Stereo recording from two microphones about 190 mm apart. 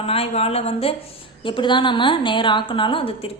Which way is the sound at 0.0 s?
30° left (ahead or behind).